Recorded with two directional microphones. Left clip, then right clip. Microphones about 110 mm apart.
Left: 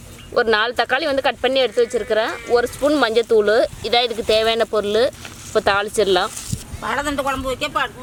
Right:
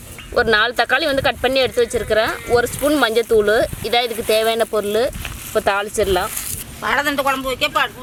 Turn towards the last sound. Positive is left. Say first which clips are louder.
# right 3 dB
turn(degrees=0)  # may be behind; listen again after turning